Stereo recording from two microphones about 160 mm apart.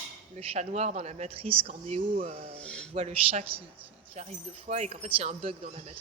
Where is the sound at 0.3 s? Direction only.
40° right (ahead or behind).